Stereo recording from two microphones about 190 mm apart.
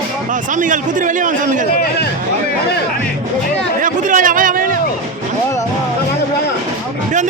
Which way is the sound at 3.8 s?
45° right (ahead or behind).